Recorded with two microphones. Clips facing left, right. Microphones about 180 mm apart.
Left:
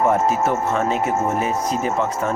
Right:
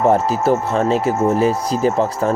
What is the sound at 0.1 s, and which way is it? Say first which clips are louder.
Speech: right 3 dB; 30° right (ahead or behind).